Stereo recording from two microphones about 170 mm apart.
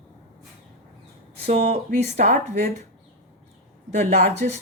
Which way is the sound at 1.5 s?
40° right (ahead or behind).